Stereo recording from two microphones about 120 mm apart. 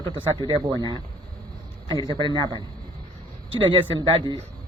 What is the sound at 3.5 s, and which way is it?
Speech, 45° right (ahead or behind).